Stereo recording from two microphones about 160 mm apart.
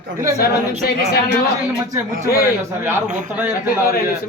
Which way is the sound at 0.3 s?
75° left (ahead or behind).